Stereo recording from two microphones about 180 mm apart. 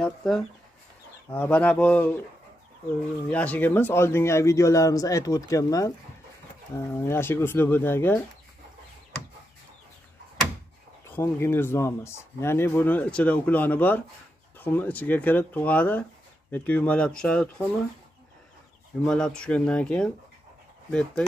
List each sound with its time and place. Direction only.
0.0 s speech: 5° left (ahead or behind)
3.3 s speech: 10° left (ahead or behind)
11.1 s speech: 10° left (ahead or behind)
19.0 s speech: 5° left (ahead or behind)